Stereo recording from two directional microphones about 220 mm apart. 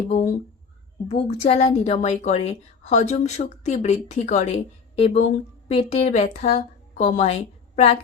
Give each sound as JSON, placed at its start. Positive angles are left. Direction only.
{"t": 0.1, "sound": "a woman's voice", "side_deg": 35}